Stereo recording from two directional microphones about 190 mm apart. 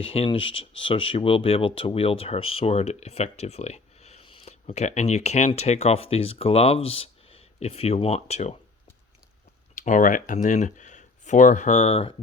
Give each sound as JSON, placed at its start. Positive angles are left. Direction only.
{"t": 0.1, "sound": "speech", "side_deg": 30}
{"t": 9.7, "sound": "speech", "side_deg": 40}